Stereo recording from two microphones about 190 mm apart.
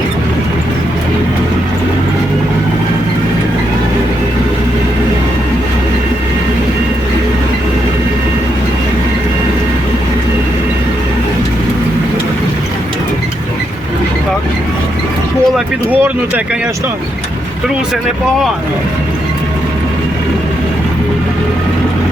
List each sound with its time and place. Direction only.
15.5 s speech: 10° right (ahead or behind)